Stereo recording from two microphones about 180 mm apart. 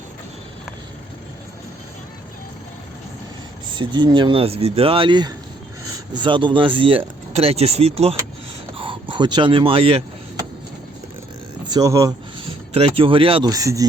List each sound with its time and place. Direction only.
3.8 s speech: 25° right (ahead or behind)
11.7 s speech: 20° right (ahead or behind)
12.7 s speech: 30° right (ahead or behind)
13.5 s speech: 20° right (ahead or behind)